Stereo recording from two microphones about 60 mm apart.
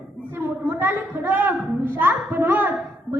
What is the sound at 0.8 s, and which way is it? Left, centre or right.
A woman's voice, right.